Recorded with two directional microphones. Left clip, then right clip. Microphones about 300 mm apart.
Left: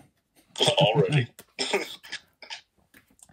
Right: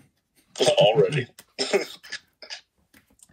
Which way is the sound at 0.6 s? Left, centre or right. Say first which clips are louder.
Right 4 dB; right.